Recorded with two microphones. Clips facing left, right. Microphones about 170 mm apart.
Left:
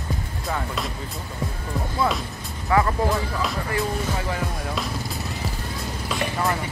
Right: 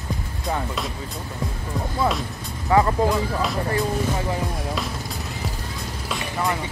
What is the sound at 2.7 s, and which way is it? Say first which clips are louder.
Speech: right 2 dB; 25° right (ahead or behind).